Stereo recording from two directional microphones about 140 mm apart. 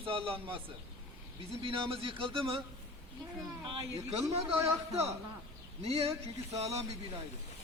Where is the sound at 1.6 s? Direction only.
40° right (ahead or behind).